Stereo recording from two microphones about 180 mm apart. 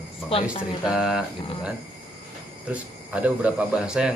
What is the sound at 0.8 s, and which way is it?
Speech, 5° right (ahead or behind).